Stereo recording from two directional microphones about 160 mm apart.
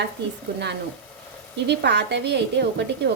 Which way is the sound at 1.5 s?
90° right.